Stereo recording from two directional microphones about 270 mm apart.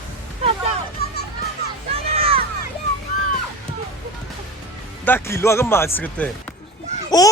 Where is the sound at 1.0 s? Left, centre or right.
Left.